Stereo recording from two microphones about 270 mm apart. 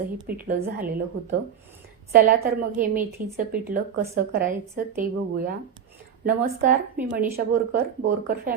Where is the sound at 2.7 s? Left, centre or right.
Right.